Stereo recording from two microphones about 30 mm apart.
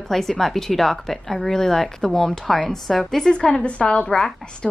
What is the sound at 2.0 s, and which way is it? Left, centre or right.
Speech, left.